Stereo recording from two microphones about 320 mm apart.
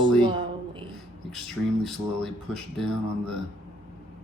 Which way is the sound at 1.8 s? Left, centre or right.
Centre.